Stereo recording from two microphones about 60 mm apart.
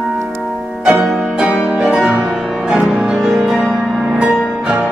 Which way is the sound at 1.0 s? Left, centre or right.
Centre.